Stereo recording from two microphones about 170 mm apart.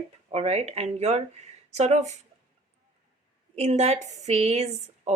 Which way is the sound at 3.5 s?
40° right (ahead or behind).